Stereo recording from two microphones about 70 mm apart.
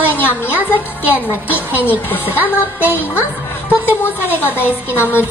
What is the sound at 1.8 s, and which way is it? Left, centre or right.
Music, left.